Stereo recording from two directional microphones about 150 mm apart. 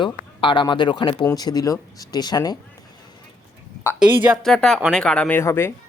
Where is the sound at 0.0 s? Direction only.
35° left (ahead or behind).